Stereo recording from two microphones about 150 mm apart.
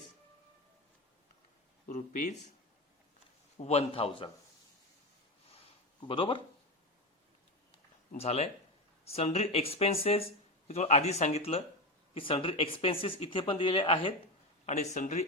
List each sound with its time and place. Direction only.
1.9 s speech: 60° left (ahead or behind)
3.6 s speech: 45° left (ahead or behind)
5.5 s a sound: 40° left (ahead or behind)
8.1 s speech: 45° left (ahead or behind)
14.7 s speech: 50° left (ahead or behind)